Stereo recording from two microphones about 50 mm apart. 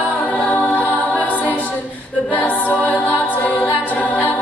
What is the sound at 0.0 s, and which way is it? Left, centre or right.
A capella, left.